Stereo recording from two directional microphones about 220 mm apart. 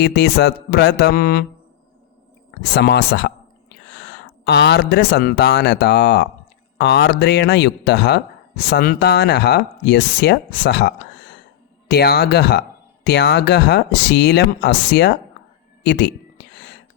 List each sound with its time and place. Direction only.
0.0 s speech: 50° left (ahead or behind)
2.7 s speech: 50° left (ahead or behind)
15.8 s a sound: 50° left (ahead or behind)